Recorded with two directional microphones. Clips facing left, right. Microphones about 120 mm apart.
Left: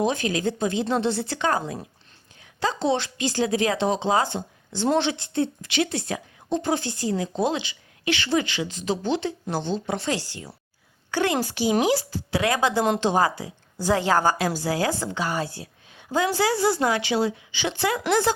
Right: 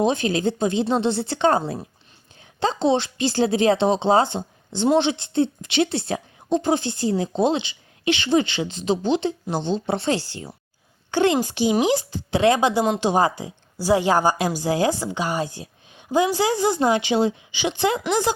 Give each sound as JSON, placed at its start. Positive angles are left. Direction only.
{"t": 0.0, "sound": "a woman's voice", "side_deg": -25}